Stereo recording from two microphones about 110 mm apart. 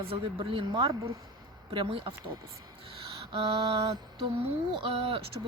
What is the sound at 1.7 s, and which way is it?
Speech, 55° right (ahead or behind).